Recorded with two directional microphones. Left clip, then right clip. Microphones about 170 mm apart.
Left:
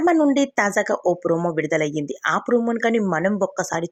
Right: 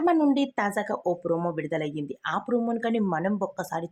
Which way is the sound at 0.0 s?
20° left (ahead or behind).